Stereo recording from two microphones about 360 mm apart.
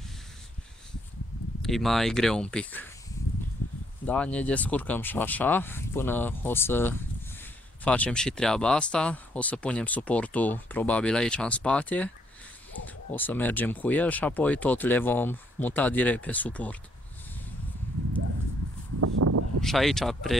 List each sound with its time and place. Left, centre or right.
1.6 s speech: centre
4.0 s speech: centre
18.9 s a sound: right
19.6 s speech: centre